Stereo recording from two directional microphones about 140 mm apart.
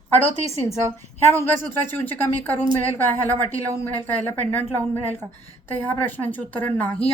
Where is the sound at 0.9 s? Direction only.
15° left (ahead or behind).